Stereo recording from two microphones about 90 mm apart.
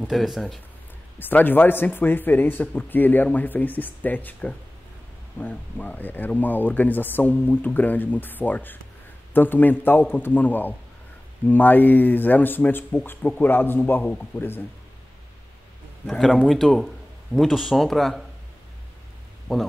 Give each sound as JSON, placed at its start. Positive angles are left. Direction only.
{"t": 0.0, "sound": "speech", "side_deg": 0}
{"t": 1.3, "sound": "speech", "side_deg": 20}
{"t": 16.4, "sound": "speech", "side_deg": 0}